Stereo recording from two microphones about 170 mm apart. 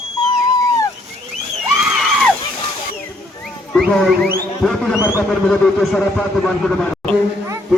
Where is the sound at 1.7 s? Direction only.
Centre (ahead or behind).